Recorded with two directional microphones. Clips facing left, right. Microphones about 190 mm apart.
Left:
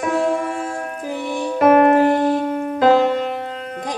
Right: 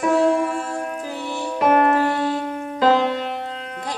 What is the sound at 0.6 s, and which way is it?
Music, 15° left (ahead or behind).